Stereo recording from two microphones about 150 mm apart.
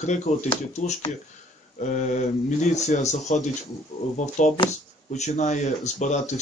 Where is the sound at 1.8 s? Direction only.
55° left (ahead or behind).